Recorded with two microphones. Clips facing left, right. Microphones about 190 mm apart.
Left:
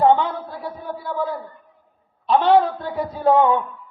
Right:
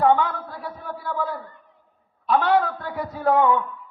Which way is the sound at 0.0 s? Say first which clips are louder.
Left 3 dB; 25° left (ahead or behind).